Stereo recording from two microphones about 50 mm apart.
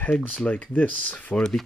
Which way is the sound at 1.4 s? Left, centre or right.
Centre.